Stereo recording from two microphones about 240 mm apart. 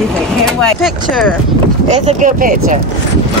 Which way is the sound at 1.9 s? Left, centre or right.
Right.